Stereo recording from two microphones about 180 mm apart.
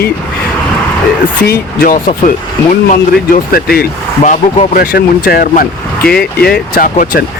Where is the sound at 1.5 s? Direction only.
50° left (ahead or behind).